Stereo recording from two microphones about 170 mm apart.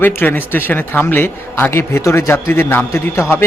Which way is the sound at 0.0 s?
10° left (ahead or behind).